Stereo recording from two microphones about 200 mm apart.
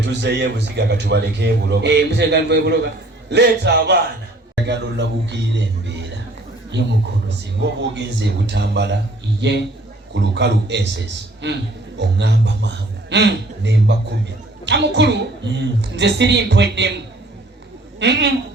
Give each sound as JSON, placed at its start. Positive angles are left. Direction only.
{"t": 0.0, "sound": "a man's voice", "side_deg": -60}
{"t": 18.0, "sound": "a man's voice", "side_deg": -60}